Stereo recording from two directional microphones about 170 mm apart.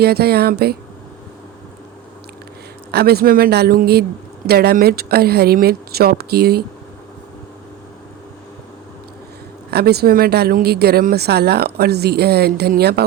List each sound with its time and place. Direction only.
0.0 s speech: 70° right (ahead or behind)
2.9 s speech: 65° right (ahead or behind)
9.6 s speech: 70° right (ahead or behind)